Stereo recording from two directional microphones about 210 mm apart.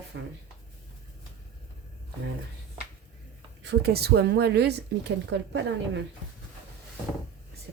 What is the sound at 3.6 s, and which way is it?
Speech, 50° right (ahead or behind).